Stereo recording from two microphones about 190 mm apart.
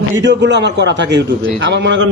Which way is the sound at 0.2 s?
65° right (ahead or behind).